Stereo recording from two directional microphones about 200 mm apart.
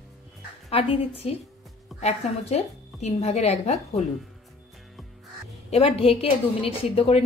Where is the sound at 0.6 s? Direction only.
30° left (ahead or behind).